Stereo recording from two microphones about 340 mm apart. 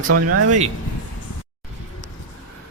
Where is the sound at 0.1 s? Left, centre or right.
Right.